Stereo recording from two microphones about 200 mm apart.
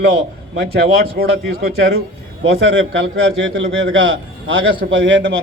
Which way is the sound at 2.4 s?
75° right (ahead or behind).